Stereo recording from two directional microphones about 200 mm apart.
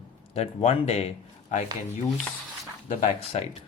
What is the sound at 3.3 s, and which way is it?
Speech, 30° left (ahead or behind).